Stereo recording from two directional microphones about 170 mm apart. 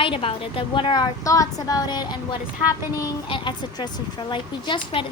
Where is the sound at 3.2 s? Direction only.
25° left (ahead or behind).